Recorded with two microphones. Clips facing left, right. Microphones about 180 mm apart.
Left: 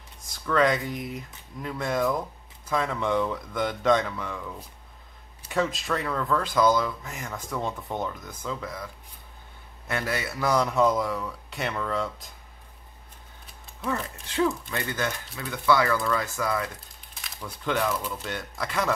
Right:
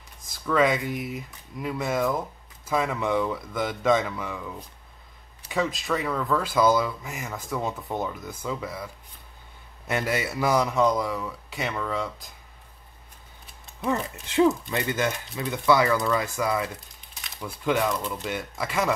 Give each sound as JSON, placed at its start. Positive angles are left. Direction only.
{"t": 0.3, "sound": "speech", "side_deg": -5}
{"t": 5.5, "sound": "speech", "side_deg": 0}
{"t": 13.8, "sound": "speech", "side_deg": -20}
{"t": 17.8, "sound": "speech", "side_deg": 5}
{"t": 18.2, "sound": "speech", "side_deg": -5}